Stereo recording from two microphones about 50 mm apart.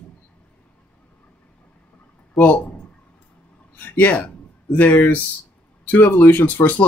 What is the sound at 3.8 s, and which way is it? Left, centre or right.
Speech, left.